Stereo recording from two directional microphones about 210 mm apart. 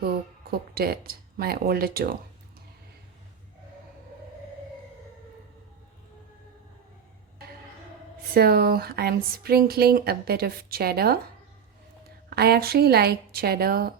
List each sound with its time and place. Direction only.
0.7 s speech: 45° right (ahead or behind)
8.3 s speech: 45° right (ahead or behind)
12.3 s speech: 50° right (ahead or behind)